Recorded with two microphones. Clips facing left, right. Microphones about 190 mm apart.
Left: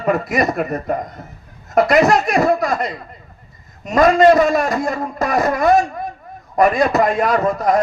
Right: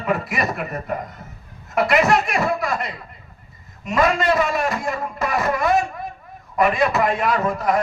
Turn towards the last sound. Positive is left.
turn(degrees=40)  # may be behind; listen again after turning